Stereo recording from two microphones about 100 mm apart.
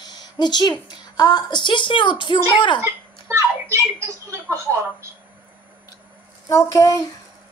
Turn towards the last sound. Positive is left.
turn(degrees=35)  # may be behind; listen again after turning